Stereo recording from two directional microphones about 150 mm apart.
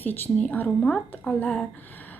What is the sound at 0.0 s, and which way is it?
A woman's voice, 10° left (ahead or behind).